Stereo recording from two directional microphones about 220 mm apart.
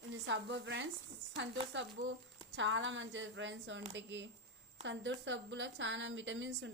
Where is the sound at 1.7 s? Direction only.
55° right (ahead or behind).